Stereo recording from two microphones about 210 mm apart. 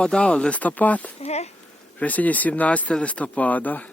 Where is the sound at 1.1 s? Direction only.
30° left (ahead or behind).